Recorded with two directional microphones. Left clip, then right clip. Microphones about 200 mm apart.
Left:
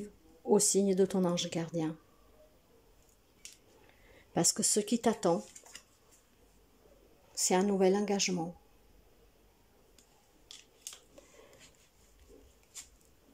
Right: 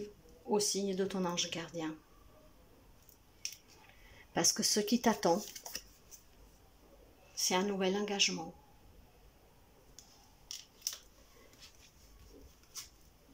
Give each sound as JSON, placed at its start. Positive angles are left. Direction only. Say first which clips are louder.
{"t": 0.5, "sound": "speech", "louder": "left 6 dB", "side_deg": 30}
{"t": 4.3, "sound": "speech", "louder": "even", "side_deg": 15}
{"t": 7.3, "sound": "speech", "louder": "left 4 dB", "side_deg": 25}